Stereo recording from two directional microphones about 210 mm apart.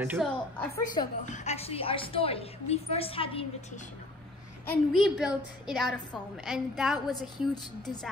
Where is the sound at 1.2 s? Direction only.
35° left (ahead or behind).